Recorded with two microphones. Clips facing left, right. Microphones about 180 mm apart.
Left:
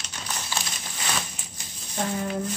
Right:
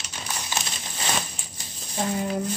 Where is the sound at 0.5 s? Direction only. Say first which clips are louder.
Right 1 dB; 20° right (ahead or behind).